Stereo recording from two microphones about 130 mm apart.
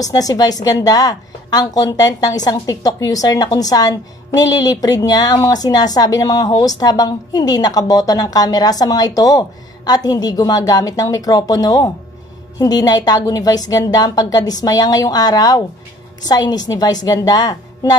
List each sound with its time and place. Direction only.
0.0 s a woman's voice: 30° left (ahead or behind)